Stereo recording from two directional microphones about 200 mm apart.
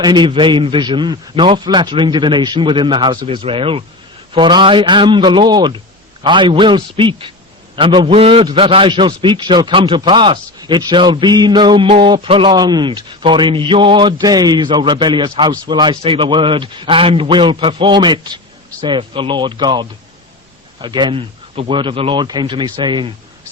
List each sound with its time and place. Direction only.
0.0 s a man's voice: 20° right (ahead or behind)